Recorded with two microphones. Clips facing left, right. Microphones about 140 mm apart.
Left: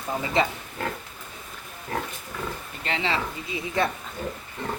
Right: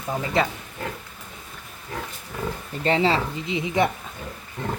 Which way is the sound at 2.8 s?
35° right (ahead or behind).